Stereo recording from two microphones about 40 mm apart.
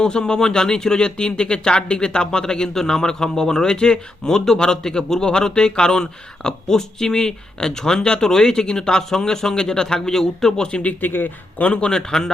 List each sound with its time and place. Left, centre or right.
0.0 s speech: centre
11.0 s speech: left
11.5 s speech: left; by 12.3 s centre